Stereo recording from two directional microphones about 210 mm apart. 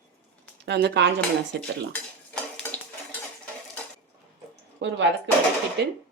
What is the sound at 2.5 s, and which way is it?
Stir, 5° left (ahead or behind).